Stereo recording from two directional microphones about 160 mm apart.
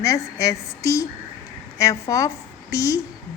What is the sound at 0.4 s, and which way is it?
Speech, 20° left (ahead or behind).